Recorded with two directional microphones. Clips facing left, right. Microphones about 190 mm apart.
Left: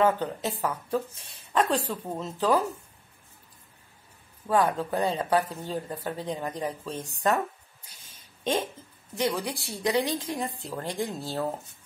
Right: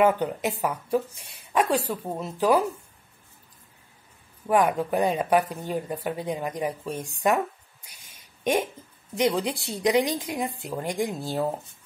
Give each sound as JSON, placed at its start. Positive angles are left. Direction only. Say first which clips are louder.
{"t": 0.0, "sound": "speech", "louder": "right 3 dB", "side_deg": -15}
{"t": 4.5, "sound": "speech", "louder": "right 3 dB", "side_deg": -15}
{"t": 7.9, "sound": "a sound", "louder": "even", "side_deg": -15}
{"t": 9.1, "sound": "speech", "louder": "right 4 dB", "side_deg": -20}